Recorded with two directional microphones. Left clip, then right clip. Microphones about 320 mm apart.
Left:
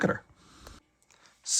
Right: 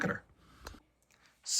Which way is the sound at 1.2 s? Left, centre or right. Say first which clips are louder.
Left 5 dB; centre.